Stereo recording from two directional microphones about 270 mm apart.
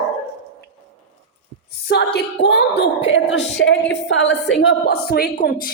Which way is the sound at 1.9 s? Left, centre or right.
Left.